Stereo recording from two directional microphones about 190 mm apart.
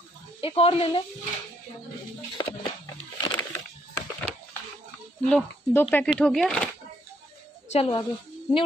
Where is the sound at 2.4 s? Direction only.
20° left (ahead or behind).